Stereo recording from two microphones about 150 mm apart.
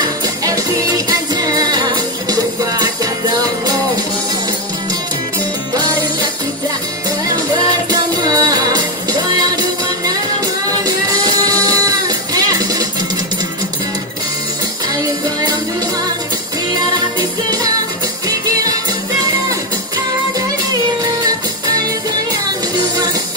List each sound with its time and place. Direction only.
0.0 s music: 25° right (ahead or behind)
8.1 s music: 25° right (ahead or behind)